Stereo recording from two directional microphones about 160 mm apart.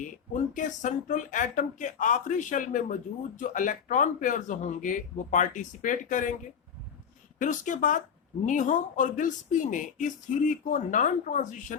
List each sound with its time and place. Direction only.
0.0 s speech: 50° left (ahead or behind)
7.3 s speech: 55° left (ahead or behind)